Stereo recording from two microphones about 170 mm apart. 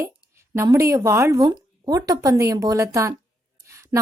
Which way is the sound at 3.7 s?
15° right (ahead or behind).